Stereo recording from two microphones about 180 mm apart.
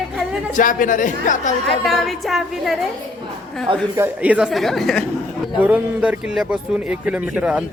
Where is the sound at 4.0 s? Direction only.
10° right (ahead or behind).